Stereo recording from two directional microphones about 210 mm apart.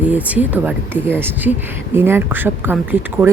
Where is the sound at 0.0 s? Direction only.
5° right (ahead or behind).